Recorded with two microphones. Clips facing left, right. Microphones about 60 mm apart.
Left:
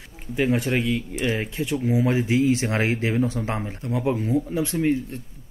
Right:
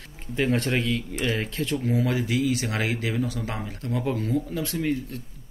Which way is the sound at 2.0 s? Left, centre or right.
Left.